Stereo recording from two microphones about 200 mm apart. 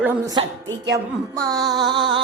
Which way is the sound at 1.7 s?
20° right (ahead or behind).